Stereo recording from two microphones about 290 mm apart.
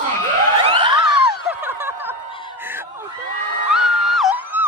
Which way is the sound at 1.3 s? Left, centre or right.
Centre.